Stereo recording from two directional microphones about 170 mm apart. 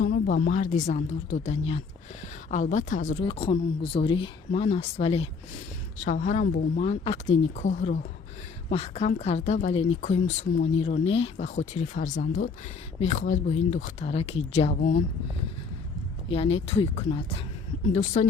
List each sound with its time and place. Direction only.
0.0 s speech: 55° left (ahead or behind)
3.2 s speech: 30° left (ahead or behind); by 6.8 s 45° left (ahead or behind)
6.8 s speech: 35° left (ahead or behind)
16.3 s speech: 35° left (ahead or behind)